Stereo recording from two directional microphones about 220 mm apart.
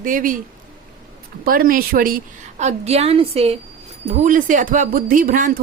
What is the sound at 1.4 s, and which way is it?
Speech, 40° right (ahead or behind).